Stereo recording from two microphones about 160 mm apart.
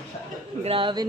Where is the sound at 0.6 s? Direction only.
30° right (ahead or behind).